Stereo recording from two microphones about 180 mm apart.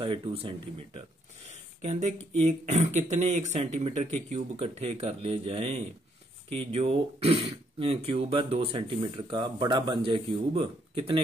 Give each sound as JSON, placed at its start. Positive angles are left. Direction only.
{"t": 0.0, "sound": "speech", "side_deg": -30}
{"t": 1.5, "sound": "a sound", "side_deg": -40}
{"t": 2.3, "sound": "speech", "side_deg": -40}